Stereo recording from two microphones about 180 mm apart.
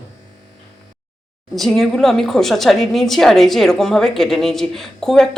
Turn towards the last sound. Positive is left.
turn(degrees=0)  # may be behind; listen again after turning